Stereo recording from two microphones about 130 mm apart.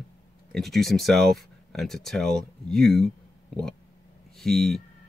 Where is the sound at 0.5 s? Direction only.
Centre (ahead or behind).